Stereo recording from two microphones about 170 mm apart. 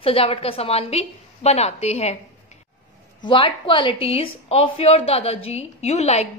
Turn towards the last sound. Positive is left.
turn(degrees=40)  # may be behind; listen again after turning